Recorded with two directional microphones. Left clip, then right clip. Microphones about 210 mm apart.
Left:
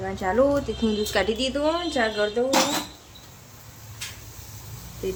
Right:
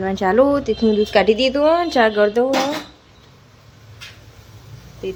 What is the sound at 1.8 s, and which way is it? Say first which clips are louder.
Speech: right 9 dB; 40° right (ahead or behind).